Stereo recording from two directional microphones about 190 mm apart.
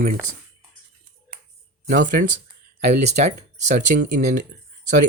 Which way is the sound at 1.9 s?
50° right (ahead or behind).